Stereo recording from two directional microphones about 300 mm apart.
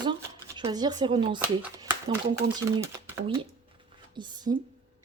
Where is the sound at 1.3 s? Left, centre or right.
Centre.